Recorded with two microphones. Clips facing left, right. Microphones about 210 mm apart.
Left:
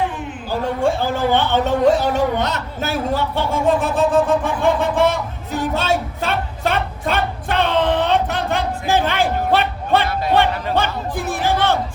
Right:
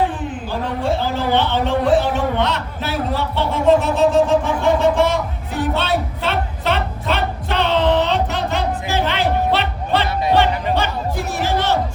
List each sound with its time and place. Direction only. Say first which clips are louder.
0.8 s speech: left 2 dB; 50° left (ahead or behind)
6.2 s a sound: right 1 dB; 50° left (ahead or behind)
10.3 s music: even; 55° left (ahead or behind)